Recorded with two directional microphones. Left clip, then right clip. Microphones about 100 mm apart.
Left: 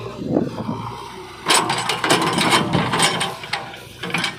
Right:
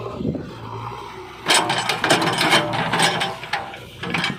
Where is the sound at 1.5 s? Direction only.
20° right (ahead or behind).